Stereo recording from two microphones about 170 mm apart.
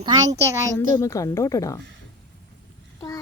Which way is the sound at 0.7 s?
15° left (ahead or behind).